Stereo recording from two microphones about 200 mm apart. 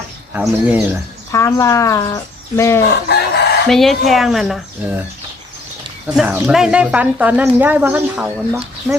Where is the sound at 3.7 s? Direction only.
Centre (ahead or behind).